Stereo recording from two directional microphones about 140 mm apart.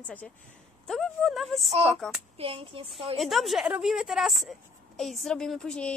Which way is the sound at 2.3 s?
40° right (ahead or behind).